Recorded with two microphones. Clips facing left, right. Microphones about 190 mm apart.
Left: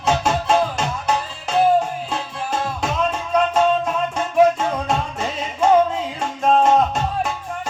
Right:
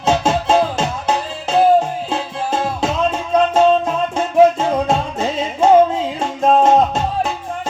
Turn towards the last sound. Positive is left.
turn(degrees=-25)  # may be behind; listen again after turning